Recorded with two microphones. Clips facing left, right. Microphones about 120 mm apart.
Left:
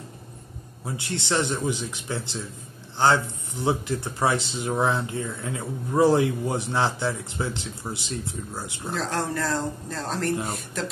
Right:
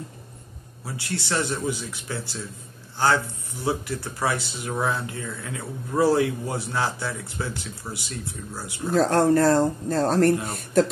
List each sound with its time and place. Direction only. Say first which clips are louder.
0.8 s speech: left 1 dB; 25° left (ahead or behind)
8.9 s speech: right 9 dB; 45° right (ahead or behind)